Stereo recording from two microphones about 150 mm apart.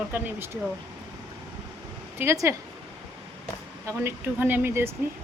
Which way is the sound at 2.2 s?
15° right (ahead or behind).